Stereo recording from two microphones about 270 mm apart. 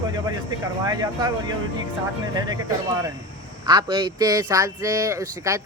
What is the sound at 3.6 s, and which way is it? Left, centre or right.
Speech, centre.